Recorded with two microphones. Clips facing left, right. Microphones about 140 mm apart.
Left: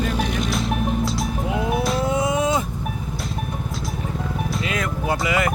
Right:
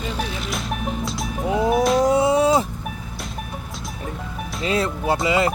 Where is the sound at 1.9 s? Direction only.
35° right (ahead or behind).